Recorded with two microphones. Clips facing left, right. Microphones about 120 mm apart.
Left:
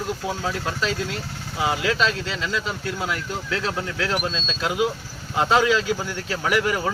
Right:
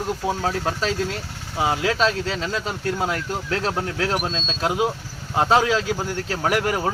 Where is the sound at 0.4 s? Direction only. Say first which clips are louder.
Even; 35° right (ahead or behind).